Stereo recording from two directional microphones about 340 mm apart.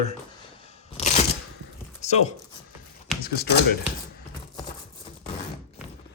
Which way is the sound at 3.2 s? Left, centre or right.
Left.